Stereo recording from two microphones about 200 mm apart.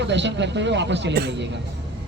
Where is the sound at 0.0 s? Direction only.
60° right (ahead or behind).